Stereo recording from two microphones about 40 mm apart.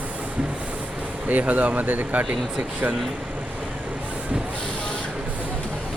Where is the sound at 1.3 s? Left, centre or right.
Right.